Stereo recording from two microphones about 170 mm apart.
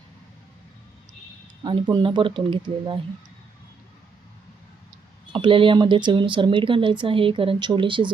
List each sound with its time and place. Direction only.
1.6 s speech: 30° right (ahead or behind)
5.2 s speech: 30° right (ahead or behind)